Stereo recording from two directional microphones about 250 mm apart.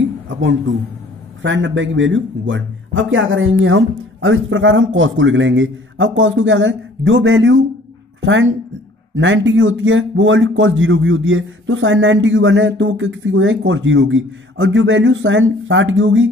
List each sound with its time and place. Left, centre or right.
0.3 s a man's voice: right